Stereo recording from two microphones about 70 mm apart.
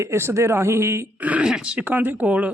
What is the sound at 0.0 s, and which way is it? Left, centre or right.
Speech, right.